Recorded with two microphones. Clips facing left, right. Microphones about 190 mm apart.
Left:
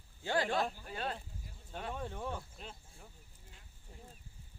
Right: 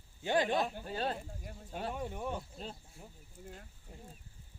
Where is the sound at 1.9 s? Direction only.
15° right (ahead or behind).